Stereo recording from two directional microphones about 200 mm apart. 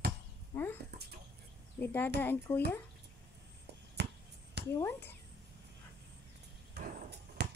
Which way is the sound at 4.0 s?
60° right (ahead or behind).